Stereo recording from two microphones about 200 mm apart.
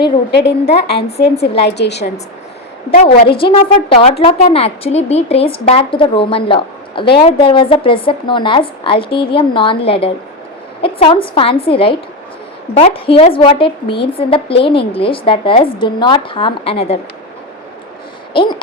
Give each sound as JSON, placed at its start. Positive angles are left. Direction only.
{"t": 0.0, "sound": "a woman's voice", "side_deg": 55}
{"t": 2.9, "sound": "a woman's voice", "side_deg": 30}